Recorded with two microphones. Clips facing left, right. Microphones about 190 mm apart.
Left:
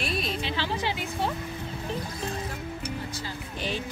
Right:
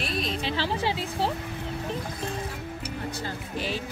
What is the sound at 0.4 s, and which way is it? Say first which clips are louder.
Speech: right 2 dB; 35° right (ahead or behind).